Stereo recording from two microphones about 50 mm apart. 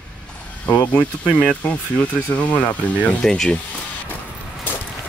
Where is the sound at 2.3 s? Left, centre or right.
Left.